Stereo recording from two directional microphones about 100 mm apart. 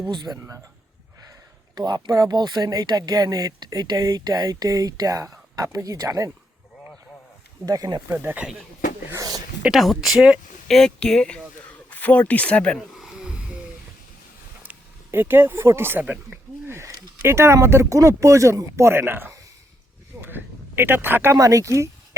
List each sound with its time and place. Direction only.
0.1 s speech: 45° right (ahead or behind)
1.7 s speech: 45° right (ahead or behind)
7.6 s speech: 40° right (ahead or behind)
8.0 s speech: 20° right (ahead or behind)
9.1 s a sound: 40° right (ahead or behind)
9.6 s speech: centre (ahead or behind)
12.9 s a sound: centre (ahead or behind)
14.6 s speech: 20° right (ahead or behind)
20.2 s a sound: 20° right (ahead or behind)
21.3 s speech: 35° right (ahead or behind)